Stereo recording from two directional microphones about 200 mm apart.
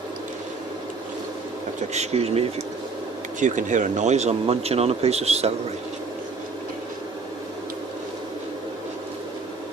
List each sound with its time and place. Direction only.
1.9 s speech: 35° right (ahead or behind)
3.4 s speech: 40° right (ahead or behind)